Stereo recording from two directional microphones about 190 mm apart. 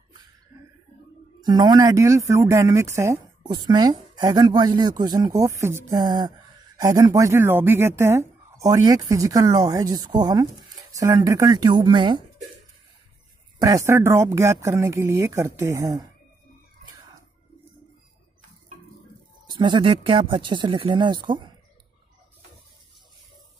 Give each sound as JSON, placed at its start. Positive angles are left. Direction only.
{"t": 1.4, "sound": "speech", "side_deg": -20}
{"t": 13.6, "sound": "speech", "side_deg": -15}
{"t": 19.4, "sound": "speech", "side_deg": -25}